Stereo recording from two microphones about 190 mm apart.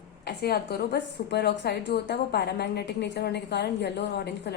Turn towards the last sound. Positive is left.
turn(degrees=60)  # may be behind; listen again after turning